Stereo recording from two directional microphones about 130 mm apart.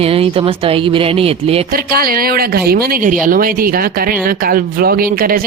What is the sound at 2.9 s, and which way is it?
Speech, 90° right.